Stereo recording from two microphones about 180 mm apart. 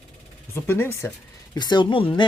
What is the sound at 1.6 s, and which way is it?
Speech, 25° left (ahead or behind).